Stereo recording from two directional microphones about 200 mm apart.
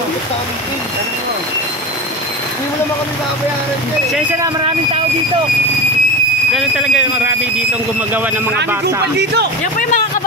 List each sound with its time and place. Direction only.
6.5 s speech: 5° right (ahead or behind)
8.5 s speech: 55° right (ahead or behind)
9.8 s speech: 40° left (ahead or behind)